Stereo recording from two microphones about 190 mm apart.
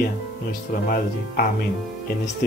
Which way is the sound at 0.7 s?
50° left (ahead or behind).